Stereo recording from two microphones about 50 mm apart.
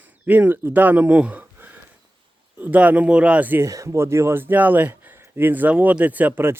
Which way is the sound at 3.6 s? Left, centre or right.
Right.